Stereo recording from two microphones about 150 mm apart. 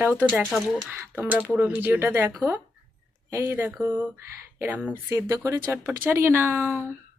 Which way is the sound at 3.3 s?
20° right (ahead or behind).